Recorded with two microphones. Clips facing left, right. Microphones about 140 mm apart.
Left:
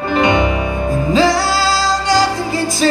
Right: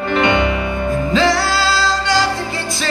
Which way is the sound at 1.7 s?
45° left (ahead or behind).